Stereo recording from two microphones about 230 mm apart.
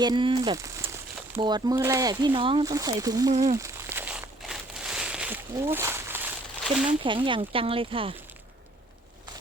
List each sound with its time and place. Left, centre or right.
0.0 s speech: centre
3.6 s a sound: centre
7.0 s speech: right